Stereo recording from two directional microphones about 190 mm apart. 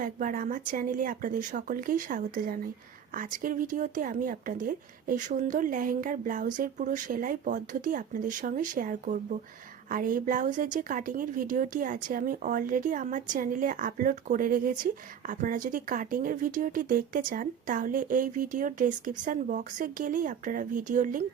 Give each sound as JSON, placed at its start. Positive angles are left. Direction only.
{"t": 0.0, "sound": "a woman's voice", "side_deg": -45}